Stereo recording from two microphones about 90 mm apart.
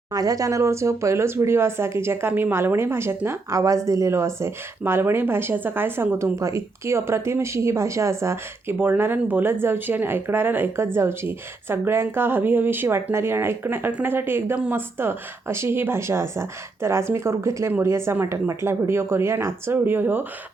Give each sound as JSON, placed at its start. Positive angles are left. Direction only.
{"t": 0.1, "sound": "a woman's voice", "side_deg": -40}